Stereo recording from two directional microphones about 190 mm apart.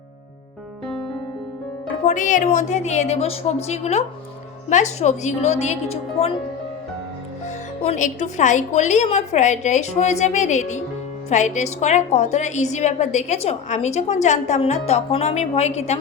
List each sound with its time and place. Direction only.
2.0 s a woman's voice: 40° left (ahead or behind)
7.8 s a woman's voice: 35° left (ahead or behind)